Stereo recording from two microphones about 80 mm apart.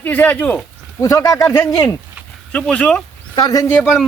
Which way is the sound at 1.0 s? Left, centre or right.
Left.